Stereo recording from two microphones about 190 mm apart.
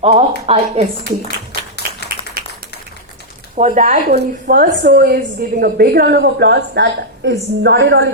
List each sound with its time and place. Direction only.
0.0 s a woman's voice: 35° right (ahead or behind)
2.4 s a sound: 50° right (ahead or behind)
3.5 s a woman's voice: 40° right (ahead or behind)
4.1 s a woman's voice: 55° right (ahead or behind)